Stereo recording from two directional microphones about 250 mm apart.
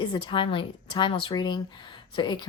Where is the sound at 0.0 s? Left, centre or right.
Centre.